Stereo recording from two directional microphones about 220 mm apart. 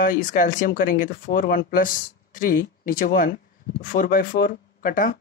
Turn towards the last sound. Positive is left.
turn(degrees=40)  # may be behind; listen again after turning